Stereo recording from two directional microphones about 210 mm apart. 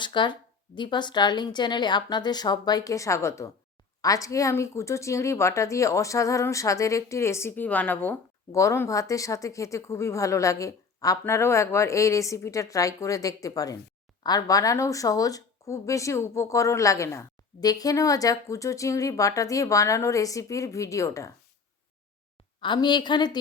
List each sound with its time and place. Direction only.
0.0 s a woman's voice: 20° left (ahead or behind)
22.6 s a woman's voice: 20° left (ahead or behind)